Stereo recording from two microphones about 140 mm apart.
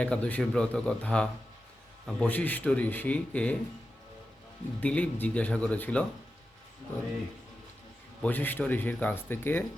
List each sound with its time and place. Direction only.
0.0 s speech: 10° left (ahead or behind)
4.8 s speech: 10° left (ahead or behind)
8.2 s speech: 15° left (ahead or behind)